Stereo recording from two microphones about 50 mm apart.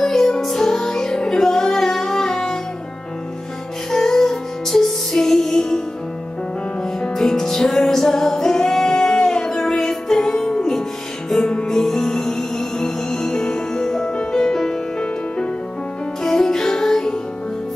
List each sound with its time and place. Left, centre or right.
0.0 s music: centre
3.9 s music: centre
6.8 s music: centre
16.2 s music: centre